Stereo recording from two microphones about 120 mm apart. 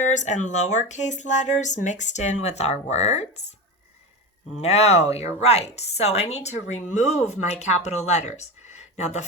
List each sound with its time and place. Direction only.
0.0 s speech: 85° left; by 3.4 s 65° left (ahead or behind)
4.6 s a woman's voice: 60° left (ahead or behind)